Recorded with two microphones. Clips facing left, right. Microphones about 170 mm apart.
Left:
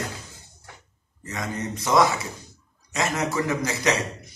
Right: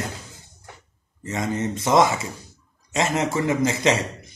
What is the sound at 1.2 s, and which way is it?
Speech, 25° right (ahead or behind).